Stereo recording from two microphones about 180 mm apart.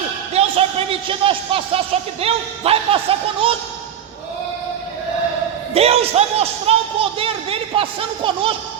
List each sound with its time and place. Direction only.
0.3 s a man's voice: 30° right (ahead or behind)
5.7 s speech: 35° right (ahead or behind)